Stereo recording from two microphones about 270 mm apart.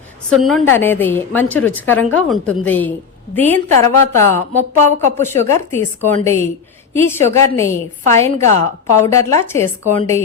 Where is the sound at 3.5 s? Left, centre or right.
Right.